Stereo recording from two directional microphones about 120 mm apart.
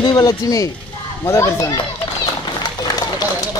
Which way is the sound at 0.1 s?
30° left (ahead or behind).